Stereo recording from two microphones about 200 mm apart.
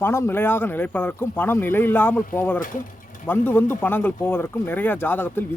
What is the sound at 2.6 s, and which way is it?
Mechanisms, 40° left (ahead or behind).